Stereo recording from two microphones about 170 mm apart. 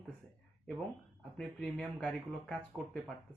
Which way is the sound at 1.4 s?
5° left (ahead or behind).